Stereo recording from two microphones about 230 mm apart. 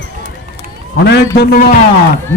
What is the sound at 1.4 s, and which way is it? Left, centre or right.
Speech, left.